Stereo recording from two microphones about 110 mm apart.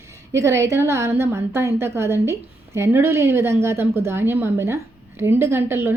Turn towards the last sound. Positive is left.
turn(degrees=-20)  # may be behind; listen again after turning